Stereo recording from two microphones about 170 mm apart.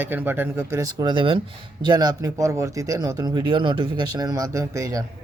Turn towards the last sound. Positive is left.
turn(degrees=-20)  # may be behind; listen again after turning